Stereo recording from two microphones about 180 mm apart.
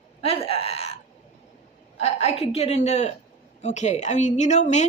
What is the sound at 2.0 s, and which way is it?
A woman's voice, 35° left (ahead or behind).